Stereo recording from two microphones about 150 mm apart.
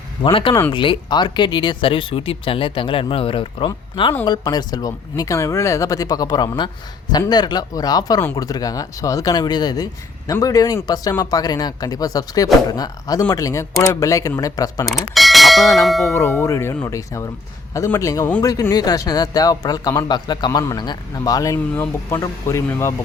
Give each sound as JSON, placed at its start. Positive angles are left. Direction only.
{"t": 0.2, "sound": "speech", "side_deg": 35}
{"t": 14.8, "sound": "bell", "side_deg": 0}
{"t": 16.4, "sound": "speech", "side_deg": 20}